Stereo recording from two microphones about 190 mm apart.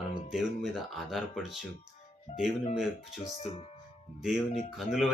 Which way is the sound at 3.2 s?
30° left (ahead or behind).